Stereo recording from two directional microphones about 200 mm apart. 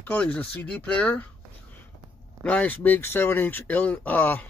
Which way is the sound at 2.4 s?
5° left (ahead or behind).